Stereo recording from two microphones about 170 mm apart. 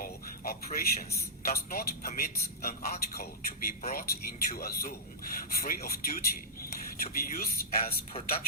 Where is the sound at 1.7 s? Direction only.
60° left (ahead or behind).